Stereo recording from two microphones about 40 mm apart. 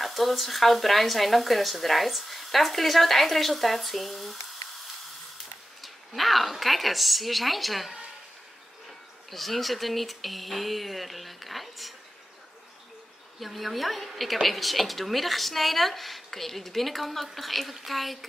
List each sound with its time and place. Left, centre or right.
0.0 s a woman's voice: centre
5.8 s a woman's voice: centre
9.3 s a woman's voice: centre
13.4 s a woman's voice: centre